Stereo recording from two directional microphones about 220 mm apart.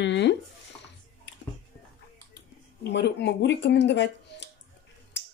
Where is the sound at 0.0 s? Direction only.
50° left (ahead or behind).